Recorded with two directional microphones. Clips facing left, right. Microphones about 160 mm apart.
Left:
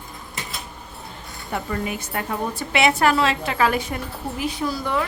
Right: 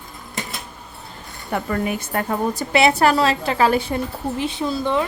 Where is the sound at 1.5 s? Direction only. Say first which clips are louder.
Right 4 dB; 55° right (ahead or behind).